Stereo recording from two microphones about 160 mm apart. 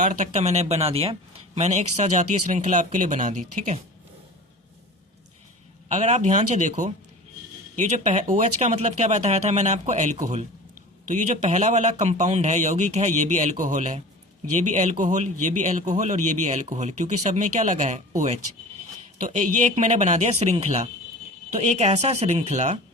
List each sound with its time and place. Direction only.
0.0 s speech: 50° right (ahead or behind)
5.9 s speech: 45° right (ahead or behind)
11.1 s speech: 50° right (ahead or behind)